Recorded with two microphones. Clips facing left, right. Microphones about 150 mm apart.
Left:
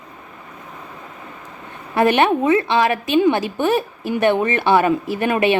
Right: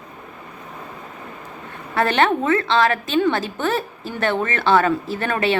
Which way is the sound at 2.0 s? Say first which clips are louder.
Left 3 dB; 15° left (ahead or behind).